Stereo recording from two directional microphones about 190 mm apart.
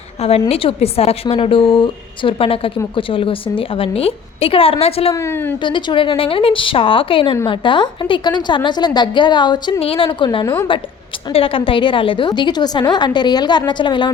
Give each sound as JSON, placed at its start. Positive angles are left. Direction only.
{"t": 0.2, "sound": "a woman's voice", "side_deg": 30}
{"t": 5.1, "sound": "a woman's voice", "side_deg": 15}
{"t": 5.6, "sound": "a woman's voice", "side_deg": 25}
{"t": 11.3, "sound": "a woman's voice", "side_deg": 30}